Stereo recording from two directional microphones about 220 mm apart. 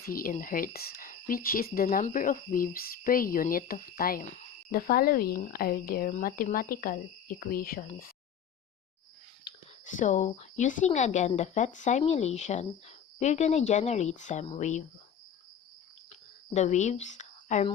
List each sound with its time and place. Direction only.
0.0 s speech: 40° left (ahead or behind)
9.8 s speech: 35° left (ahead or behind)
16.0 s a sound: 30° left (ahead or behind)